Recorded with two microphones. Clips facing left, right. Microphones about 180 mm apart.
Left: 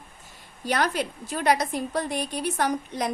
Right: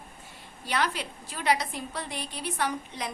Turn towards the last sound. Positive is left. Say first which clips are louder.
# left 5 dB
turn(degrees=45)  # may be behind; listen again after turning